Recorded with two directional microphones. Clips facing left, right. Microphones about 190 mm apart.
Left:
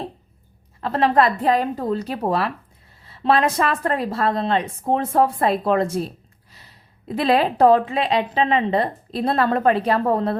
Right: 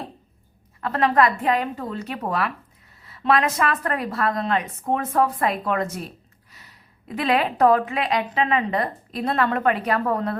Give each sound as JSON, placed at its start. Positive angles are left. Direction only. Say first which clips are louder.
{"t": 0.8, "sound": "a woman's voice", "louder": "left 2 dB", "side_deg": 30}